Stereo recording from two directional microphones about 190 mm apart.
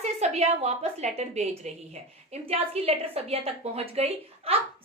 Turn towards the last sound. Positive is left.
turn(degrees=-30)  # may be behind; listen again after turning